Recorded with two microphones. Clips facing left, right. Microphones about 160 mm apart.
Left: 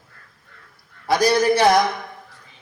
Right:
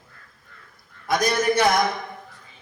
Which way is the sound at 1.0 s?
30° left (ahead or behind).